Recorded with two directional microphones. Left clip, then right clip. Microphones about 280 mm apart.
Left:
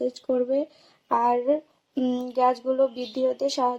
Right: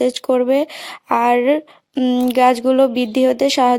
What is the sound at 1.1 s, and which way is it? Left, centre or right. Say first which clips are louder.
Speech: right 8 dB; right.